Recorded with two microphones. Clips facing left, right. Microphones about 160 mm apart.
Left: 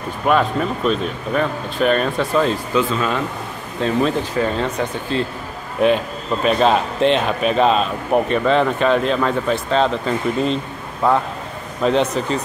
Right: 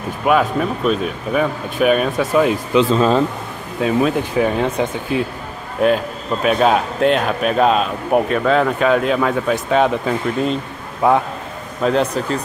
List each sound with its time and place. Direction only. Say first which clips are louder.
0.2 s speech: right 1 dB; 5° right (ahead or behind)
2.9 s speech: right 6 dB; 35° right (ahead or behind)
3.8 s a man's voice: right 2 dB; 10° right (ahead or behind)